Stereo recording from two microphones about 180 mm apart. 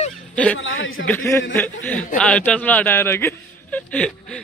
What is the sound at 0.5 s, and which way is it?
Speech, 90° left.